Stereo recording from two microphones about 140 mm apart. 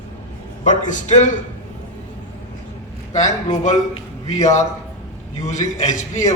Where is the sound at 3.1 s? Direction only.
60° left (ahead or behind).